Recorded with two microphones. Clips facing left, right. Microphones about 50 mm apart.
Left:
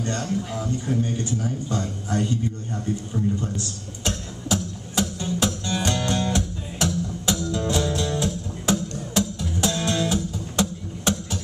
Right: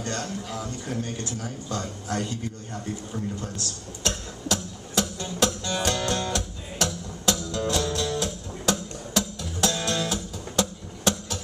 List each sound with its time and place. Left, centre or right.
0.2 s speech: centre
3.3 s music: centre
5.2 s music: centre